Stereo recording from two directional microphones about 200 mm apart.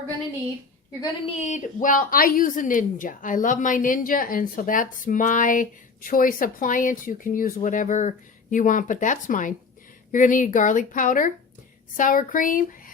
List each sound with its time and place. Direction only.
1.0 s speech: 30° left (ahead or behind)